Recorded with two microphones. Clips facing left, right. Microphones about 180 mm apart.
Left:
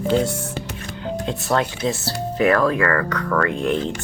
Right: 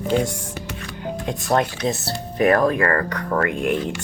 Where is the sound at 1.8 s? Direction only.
20° right (ahead or behind).